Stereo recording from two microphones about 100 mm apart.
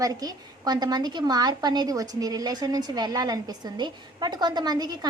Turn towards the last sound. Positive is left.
turn(degrees=-40)  # may be behind; listen again after turning